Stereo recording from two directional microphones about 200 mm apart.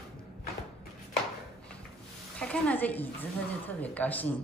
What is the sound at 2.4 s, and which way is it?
A woman's voice, 5° left (ahead or behind).